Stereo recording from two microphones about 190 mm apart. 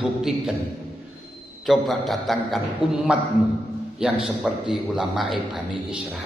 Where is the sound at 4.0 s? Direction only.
5° right (ahead or behind).